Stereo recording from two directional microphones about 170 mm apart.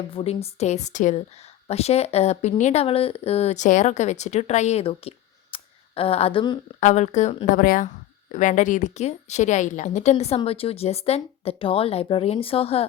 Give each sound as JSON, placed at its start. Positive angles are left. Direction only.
{"t": 0.1, "sound": "speech", "side_deg": 35}
{"t": 6.7, "sound": "speech", "side_deg": 45}